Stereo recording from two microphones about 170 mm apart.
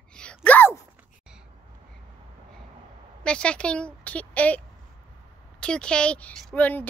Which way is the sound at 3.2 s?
5° left (ahead or behind).